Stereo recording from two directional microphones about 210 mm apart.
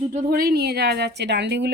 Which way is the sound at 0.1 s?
40° right (ahead or behind).